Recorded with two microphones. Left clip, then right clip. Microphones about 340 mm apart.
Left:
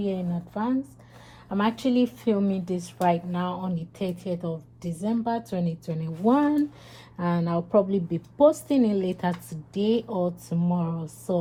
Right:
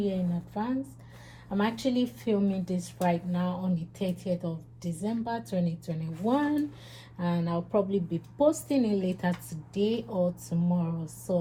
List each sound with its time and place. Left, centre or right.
0.0 s speech: left